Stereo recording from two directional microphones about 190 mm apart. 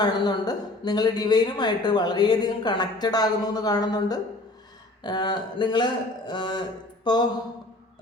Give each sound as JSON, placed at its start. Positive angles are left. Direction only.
{"t": 0.0, "sound": "speech", "side_deg": 20}